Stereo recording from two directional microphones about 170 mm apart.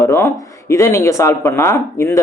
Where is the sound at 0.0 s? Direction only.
15° left (ahead or behind).